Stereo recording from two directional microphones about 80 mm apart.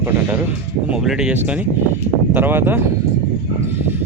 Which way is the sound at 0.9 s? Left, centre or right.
Centre.